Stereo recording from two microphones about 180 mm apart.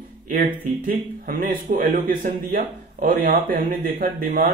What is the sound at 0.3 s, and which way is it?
Speech, 50° right (ahead or behind).